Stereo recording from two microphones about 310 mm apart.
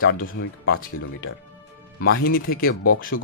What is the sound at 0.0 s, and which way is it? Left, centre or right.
Speech, left.